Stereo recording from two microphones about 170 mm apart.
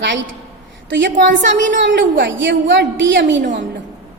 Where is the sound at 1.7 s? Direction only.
90° right.